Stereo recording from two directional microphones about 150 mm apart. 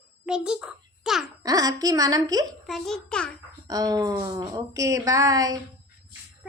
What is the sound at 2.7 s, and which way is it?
Speech, centre (ahead or behind).